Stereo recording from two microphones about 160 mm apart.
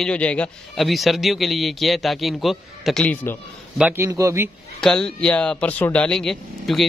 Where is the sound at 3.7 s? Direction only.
10° right (ahead or behind).